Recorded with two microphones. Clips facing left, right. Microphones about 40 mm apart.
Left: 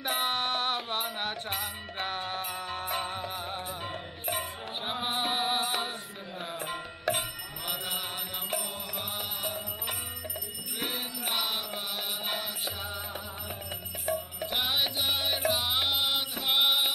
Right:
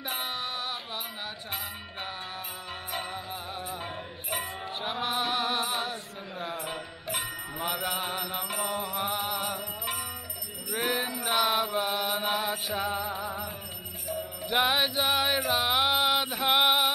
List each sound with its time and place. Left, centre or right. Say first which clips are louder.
0.0 s music: left 4 dB; left
4.9 s music: right 1 dB; left
7.6 s mantra: right 5 dB; centre
8.0 s music: right 5 dB; centre
8.6 s mantra: right 7 dB; centre
10.8 s music: right 6 dB; centre
14.5 s music: right 5 dB; centre